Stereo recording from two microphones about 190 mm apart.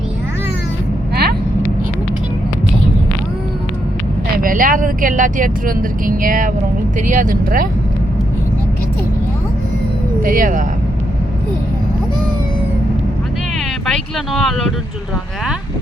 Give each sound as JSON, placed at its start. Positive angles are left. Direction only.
{"t": 1.1, "sound": "vehicle", "side_deg": -55}
{"t": 4.4, "sound": "speech", "side_deg": -45}
{"t": 10.2, "sound": "speech", "side_deg": -45}
{"t": 13.8, "sound": "speech", "side_deg": 0}